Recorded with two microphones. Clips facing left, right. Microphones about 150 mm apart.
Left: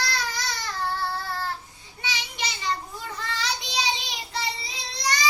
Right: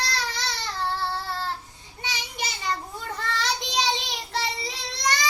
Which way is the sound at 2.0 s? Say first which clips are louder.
Even; 45° right (ahead or behind).